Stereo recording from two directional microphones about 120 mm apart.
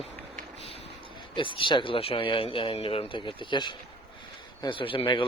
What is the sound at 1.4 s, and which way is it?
Speech, 45° left (ahead or behind).